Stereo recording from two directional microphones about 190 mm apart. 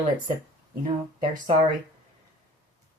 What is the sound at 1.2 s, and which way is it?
Speech, 45° right (ahead or behind).